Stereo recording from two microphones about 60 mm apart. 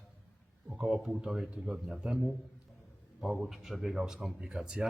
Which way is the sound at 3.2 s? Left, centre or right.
Centre.